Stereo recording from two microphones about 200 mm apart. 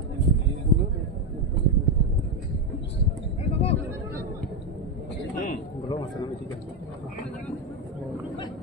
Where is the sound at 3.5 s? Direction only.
30° left (ahead or behind).